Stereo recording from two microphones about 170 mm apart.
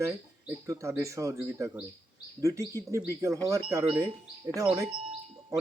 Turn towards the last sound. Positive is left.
turn(degrees=-20)  # may be behind; listen again after turning